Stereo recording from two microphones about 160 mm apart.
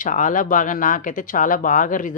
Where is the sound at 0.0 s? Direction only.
55° left (ahead or behind).